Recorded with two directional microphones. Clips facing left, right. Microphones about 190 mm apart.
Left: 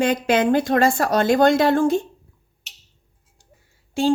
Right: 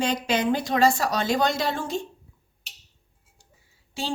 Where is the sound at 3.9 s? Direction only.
50° left (ahead or behind).